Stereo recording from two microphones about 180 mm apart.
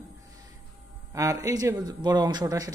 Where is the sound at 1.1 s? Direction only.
20° right (ahead or behind).